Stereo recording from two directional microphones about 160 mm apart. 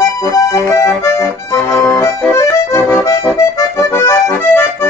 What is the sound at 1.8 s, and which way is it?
Accordion, 15° left (ahead or behind).